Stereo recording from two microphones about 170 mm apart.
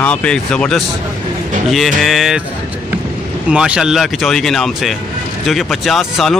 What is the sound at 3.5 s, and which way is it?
Speech, 5° right (ahead or behind).